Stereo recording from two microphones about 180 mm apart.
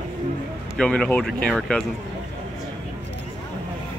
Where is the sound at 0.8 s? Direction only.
5° left (ahead or behind).